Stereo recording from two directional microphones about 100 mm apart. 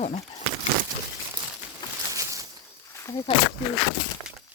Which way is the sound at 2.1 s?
35° right (ahead or behind).